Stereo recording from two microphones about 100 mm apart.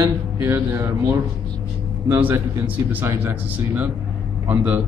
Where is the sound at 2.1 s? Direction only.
25° right (ahead or behind).